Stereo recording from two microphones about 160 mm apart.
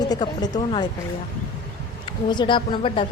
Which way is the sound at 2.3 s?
30° left (ahead or behind).